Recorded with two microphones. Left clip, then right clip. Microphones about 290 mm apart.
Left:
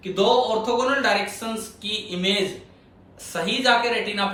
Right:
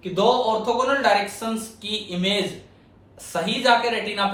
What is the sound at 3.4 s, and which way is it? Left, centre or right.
Speech, right.